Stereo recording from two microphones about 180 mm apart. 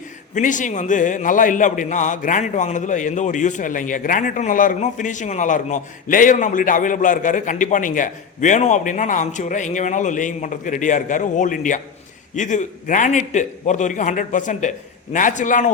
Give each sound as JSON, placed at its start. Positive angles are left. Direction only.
{"t": 0.3, "sound": "a man's voice", "side_deg": 45}